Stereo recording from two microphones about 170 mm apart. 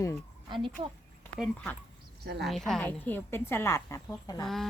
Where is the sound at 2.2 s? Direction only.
75° right (ahead or behind).